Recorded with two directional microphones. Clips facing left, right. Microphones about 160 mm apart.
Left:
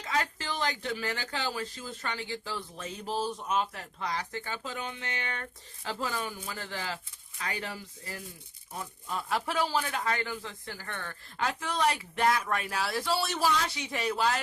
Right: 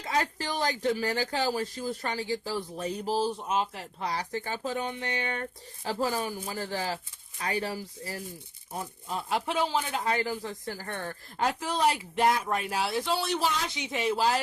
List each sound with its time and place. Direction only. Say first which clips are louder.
0.0 s speech: right 3 dB; 35° right (ahead or behind)